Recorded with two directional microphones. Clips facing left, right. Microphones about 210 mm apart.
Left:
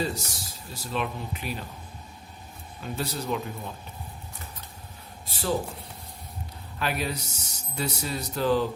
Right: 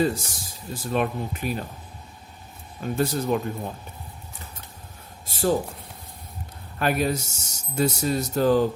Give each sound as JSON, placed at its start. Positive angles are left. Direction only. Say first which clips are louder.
{"t": 0.0, "sound": "speech", "louder": "right 6 dB", "side_deg": -50}
{"t": 2.8, "sound": "speech", "louder": "right 7 dB", "side_deg": -50}
{"t": 5.2, "sound": "speech", "louder": "right 8 dB", "side_deg": -45}
{"t": 6.7, "sound": "speech", "louder": "right 7 dB", "side_deg": -50}